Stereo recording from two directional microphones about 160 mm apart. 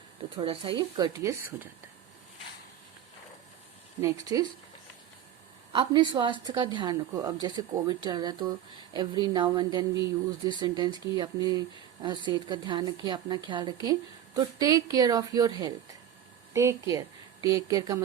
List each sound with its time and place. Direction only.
0.3 s speech: 35° right (ahead or behind); by 1.6 s 15° right (ahead or behind)
4.0 s speech: 25° right (ahead or behind)
5.7 s a woman's voice: 30° right (ahead or behind)